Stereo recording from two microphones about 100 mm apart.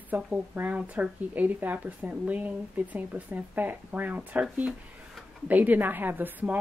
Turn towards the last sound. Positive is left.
turn(degrees=-15)  # may be behind; listen again after turning